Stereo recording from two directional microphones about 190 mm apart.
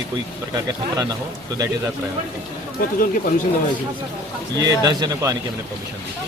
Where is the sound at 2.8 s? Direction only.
45° left (ahead or behind).